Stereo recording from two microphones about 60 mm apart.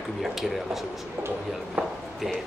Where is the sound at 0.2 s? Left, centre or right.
Centre.